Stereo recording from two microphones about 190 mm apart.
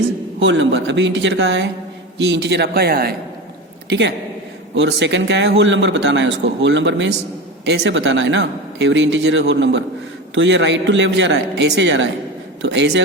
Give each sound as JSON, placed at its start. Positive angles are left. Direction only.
{"t": 0.3, "sound": "a man's voice", "side_deg": -75}
{"t": 3.8, "sound": "a man's voice", "side_deg": -70}